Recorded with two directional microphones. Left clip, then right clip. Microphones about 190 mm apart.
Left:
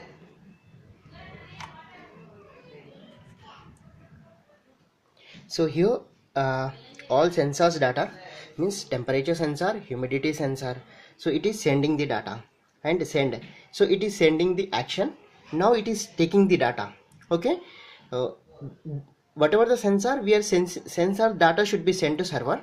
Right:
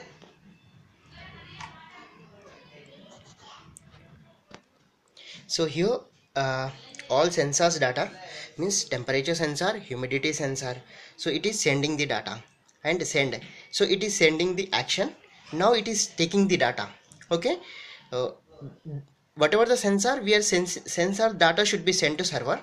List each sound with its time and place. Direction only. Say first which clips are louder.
5.2 s speech: left 1 dB; 15° left (ahead or behind)
19.3 s speech: left 1 dB; 10° left (ahead or behind)